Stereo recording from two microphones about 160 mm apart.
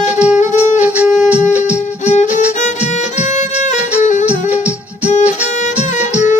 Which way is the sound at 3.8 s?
10° right (ahead or behind).